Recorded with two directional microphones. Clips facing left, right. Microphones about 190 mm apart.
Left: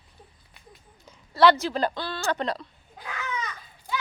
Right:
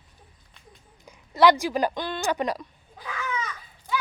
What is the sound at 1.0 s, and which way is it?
A woman's voice, 15° right (ahead or behind).